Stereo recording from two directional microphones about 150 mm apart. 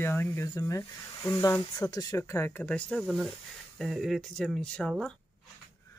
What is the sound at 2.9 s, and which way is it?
Speech, 5° right (ahead or behind).